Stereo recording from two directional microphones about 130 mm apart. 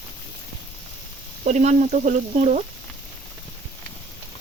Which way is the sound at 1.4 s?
60° right (ahead or behind).